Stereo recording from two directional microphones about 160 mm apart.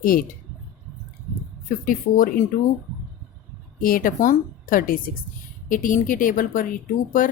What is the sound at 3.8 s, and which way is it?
Speech, 60° left (ahead or behind).